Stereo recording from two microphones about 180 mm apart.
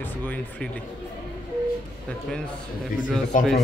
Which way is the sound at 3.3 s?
45° left (ahead or behind).